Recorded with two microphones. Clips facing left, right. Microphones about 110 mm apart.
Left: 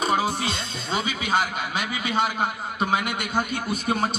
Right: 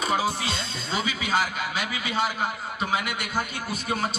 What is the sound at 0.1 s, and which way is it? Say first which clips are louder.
Music: left 2 dB; 20° left (ahead or behind).